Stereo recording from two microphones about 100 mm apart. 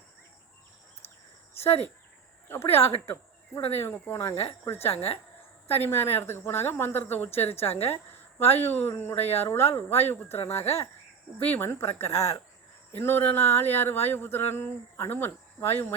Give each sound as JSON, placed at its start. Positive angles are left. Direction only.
{"t": 1.5, "sound": "speech", "side_deg": 90}
{"t": 2.5, "sound": "speech", "side_deg": 25}
{"t": 3.8, "sound": "a sound", "side_deg": 25}